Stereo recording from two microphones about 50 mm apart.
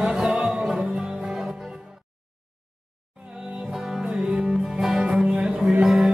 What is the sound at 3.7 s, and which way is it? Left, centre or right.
Music, centre.